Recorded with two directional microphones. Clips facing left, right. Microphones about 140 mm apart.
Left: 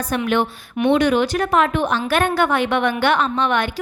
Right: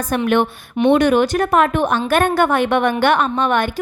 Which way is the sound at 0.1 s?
50° right (ahead or behind).